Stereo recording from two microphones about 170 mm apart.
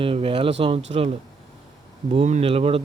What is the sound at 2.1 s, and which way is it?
Speech, 40° right (ahead or behind).